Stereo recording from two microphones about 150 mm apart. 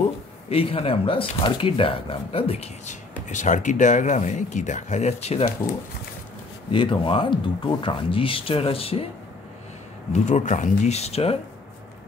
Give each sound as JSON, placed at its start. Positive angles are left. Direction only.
{"t": 0.5, "sound": "speech", "side_deg": 40}
{"t": 6.7, "sound": "speech", "side_deg": 35}
{"t": 10.1, "sound": "speech", "side_deg": 50}